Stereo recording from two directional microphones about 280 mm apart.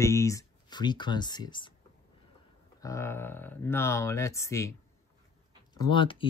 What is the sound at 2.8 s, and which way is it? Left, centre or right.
Speech, centre.